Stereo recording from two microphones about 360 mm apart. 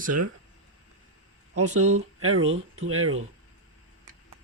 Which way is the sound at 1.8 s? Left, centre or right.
Centre.